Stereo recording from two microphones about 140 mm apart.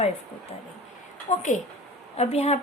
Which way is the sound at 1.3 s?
45° left (ahead or behind).